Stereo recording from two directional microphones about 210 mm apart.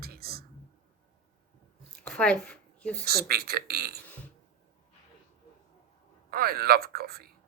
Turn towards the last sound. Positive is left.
turn(degrees=-45)  # may be behind; listen again after turning